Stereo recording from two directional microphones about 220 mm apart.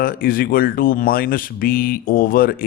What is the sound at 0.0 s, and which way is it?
Speech, 40° left (ahead or behind).